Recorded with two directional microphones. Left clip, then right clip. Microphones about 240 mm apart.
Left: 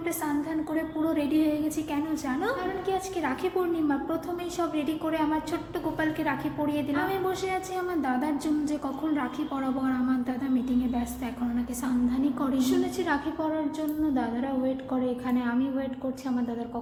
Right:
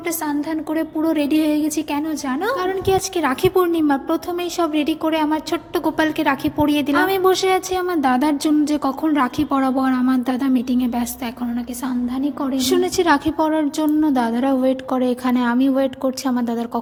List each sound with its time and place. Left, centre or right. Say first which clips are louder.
0.7 s a woman's voice: right 10 dB; right
12.5 s a woman's voice: right 9 dB; right